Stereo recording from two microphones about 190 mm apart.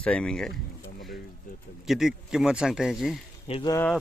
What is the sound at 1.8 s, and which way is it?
Speech, centre (ahead or behind).